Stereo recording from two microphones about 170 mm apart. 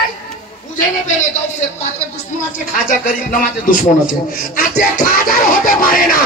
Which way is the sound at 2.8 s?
55° left (ahead or behind).